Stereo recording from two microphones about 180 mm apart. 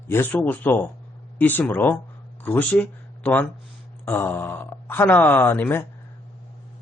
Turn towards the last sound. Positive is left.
turn(degrees=10)  # may be behind; listen again after turning